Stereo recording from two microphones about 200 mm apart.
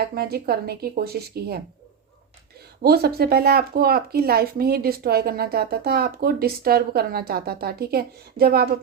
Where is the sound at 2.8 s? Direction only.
50° right (ahead or behind).